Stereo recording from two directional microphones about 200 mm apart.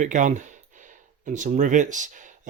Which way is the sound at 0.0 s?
40° right (ahead or behind).